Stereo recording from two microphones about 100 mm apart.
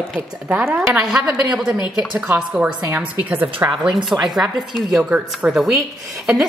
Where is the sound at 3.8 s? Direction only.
Centre (ahead or behind).